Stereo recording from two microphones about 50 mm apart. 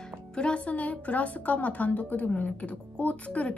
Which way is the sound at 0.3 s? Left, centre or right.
Centre.